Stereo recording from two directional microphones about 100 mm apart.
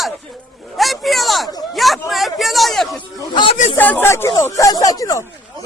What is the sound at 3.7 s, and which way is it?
Speech, 20° left (ahead or behind).